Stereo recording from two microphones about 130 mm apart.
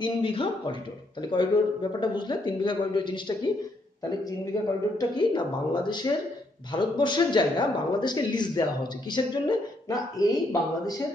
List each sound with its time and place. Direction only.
0.0 s speech: 40° left (ahead or behind)
4.9 s speech: 35° left (ahead or behind)